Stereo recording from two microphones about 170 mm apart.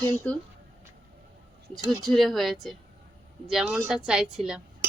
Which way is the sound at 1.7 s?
Centre (ahead or behind).